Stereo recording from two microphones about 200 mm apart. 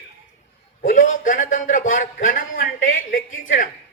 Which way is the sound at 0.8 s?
40° left (ahead or behind).